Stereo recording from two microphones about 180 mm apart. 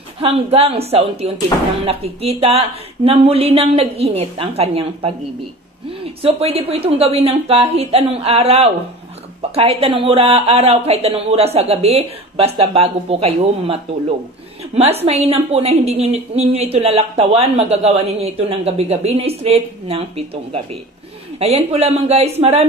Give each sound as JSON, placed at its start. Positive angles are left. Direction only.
{"t": 0.2, "sound": "a woman's voice", "side_deg": -35}